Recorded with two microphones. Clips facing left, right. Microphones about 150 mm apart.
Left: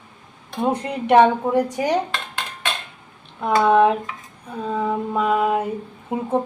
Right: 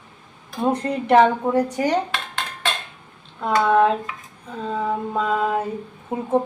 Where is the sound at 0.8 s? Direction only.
15° left (ahead or behind).